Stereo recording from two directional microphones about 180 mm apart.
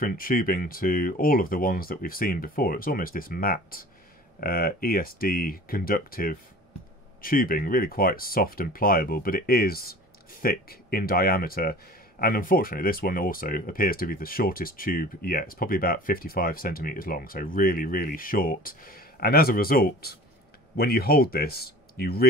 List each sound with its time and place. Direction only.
0.0 s speech: 50° left (ahead or behind)